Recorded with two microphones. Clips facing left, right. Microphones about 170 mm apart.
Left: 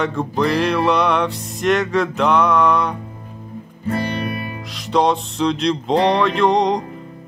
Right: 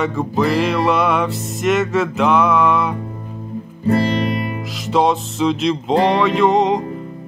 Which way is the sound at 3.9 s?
30° right (ahead or behind).